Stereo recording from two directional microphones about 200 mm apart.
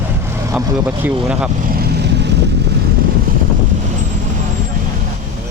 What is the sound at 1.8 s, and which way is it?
Vehicle, 55° right (ahead or behind).